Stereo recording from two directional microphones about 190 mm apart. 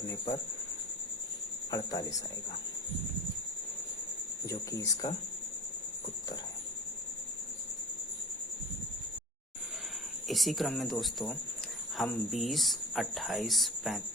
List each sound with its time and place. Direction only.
1.7 s speech: 20° left (ahead or behind)
4.4 s speech: 15° left (ahead or behind)
10.2 s speech: centre (ahead or behind)